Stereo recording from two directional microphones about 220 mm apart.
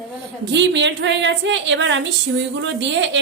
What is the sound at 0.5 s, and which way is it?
A woman's voice, 55° right (ahead or behind).